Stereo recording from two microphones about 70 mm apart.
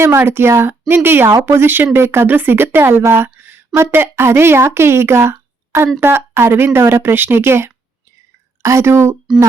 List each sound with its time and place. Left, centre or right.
0.0 s speech: right
3.0 s a sound: right
3.9 s speech: right